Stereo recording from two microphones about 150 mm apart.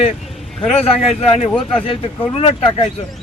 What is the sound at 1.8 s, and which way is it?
Speech, 40° left (ahead or behind).